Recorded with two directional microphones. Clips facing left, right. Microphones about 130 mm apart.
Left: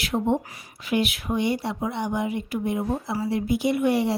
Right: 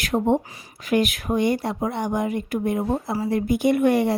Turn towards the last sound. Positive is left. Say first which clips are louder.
# right 3 dB
turn(degrees=-50)  # may be behind; listen again after turning